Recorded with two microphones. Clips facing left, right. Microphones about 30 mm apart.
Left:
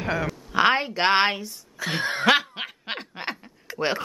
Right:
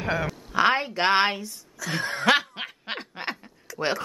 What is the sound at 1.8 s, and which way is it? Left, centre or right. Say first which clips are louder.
Speech: left 2 dB; left.